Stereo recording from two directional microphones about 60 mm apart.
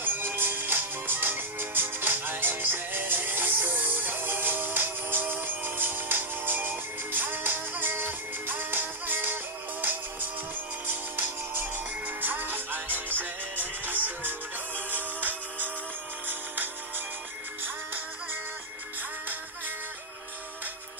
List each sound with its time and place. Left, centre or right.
0.0 s music: right
17.6 s music: right